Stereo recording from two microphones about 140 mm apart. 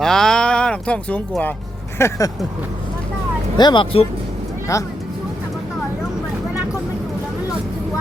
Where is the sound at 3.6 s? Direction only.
35° left (ahead or behind).